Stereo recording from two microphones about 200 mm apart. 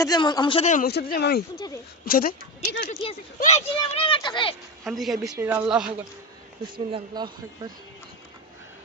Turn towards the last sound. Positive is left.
turn(degrees=-20)  # may be behind; listen again after turning